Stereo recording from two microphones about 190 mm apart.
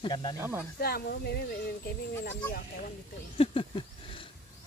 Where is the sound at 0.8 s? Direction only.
55° left (ahead or behind).